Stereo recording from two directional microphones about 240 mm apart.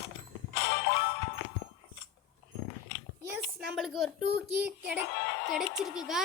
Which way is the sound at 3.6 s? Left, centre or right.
Centre.